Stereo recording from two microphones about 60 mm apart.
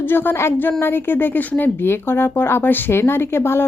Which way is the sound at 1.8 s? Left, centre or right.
Left.